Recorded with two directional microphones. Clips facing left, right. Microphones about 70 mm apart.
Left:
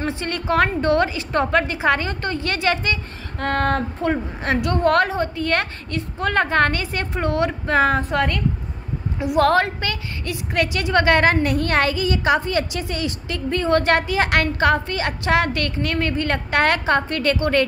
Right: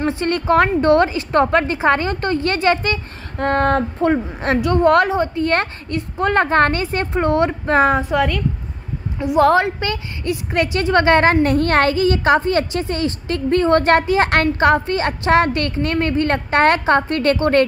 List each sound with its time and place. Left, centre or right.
0.2 s a woman's voice: right
4.8 s a woman's voice: centre
8.1 s speech: centre
9.5 s a woman's voice: centre
9.8 s a woman's voice: right
14.6 s a woman's voice: right